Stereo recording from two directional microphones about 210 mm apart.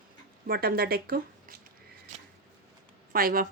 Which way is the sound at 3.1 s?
45° right (ahead or behind).